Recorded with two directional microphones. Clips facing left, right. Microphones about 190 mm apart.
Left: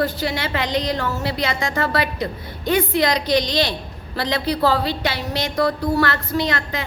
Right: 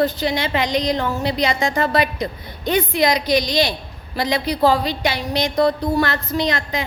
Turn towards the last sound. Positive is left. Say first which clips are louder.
# right 1 dB
turn(degrees=-15)  # may be behind; listen again after turning